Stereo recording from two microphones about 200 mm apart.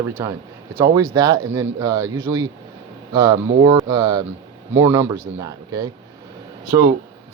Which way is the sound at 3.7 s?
15° right (ahead or behind).